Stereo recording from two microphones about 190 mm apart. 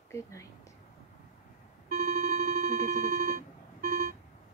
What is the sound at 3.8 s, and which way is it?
Vehicle, 50° right (ahead or behind).